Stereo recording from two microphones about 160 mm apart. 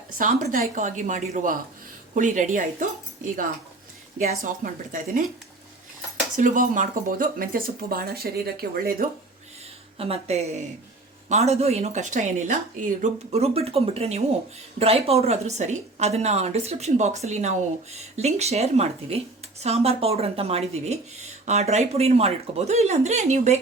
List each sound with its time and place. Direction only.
0.2 s speech: 55° right (ahead or behind)
4.6 s speech: 55° right (ahead or behind)
6.3 s speech: 55° right (ahead or behind)
10.0 s speech: 40° right (ahead or behind)
13.0 s a woman's voice: 40° right (ahead or behind)